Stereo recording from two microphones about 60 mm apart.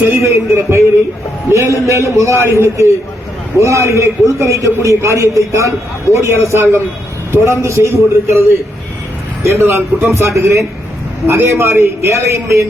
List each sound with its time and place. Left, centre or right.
0.1 s a man's voice: right